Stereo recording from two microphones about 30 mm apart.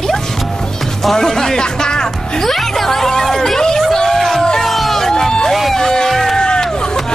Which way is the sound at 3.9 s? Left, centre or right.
Centre.